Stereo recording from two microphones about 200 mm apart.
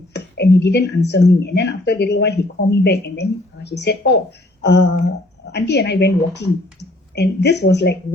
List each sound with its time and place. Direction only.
0.1 s a woman's voice: 55° left (ahead or behind)